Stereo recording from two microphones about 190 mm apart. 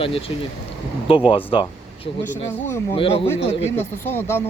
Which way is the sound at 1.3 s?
30° left (ahead or behind).